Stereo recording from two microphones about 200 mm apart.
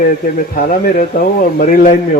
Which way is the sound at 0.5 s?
45° left (ahead or behind).